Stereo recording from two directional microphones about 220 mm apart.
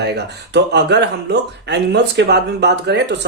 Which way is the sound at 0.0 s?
50° right (ahead or behind).